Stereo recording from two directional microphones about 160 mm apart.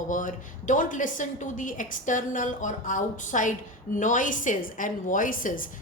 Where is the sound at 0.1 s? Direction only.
55° left (ahead or behind).